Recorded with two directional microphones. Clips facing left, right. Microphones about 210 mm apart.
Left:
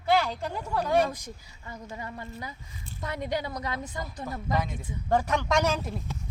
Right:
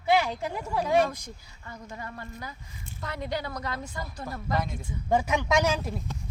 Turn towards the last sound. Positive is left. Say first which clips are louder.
# right 1 dB
turn(degrees=0)  # may be behind; listen again after turning